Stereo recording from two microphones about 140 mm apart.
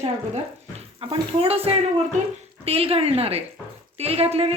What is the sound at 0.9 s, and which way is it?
Speech, 40° right (ahead or behind).